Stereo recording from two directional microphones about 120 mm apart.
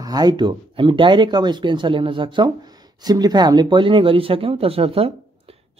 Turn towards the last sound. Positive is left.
turn(degrees=-55)  # may be behind; listen again after turning